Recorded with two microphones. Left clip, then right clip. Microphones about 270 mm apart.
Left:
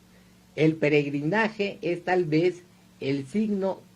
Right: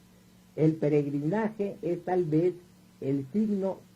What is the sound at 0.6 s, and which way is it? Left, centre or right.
Speech, left.